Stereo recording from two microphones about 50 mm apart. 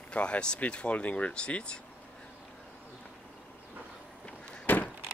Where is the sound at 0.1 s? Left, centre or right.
Left.